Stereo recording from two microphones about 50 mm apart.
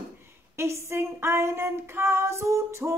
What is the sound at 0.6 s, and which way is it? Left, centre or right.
Female singing, right.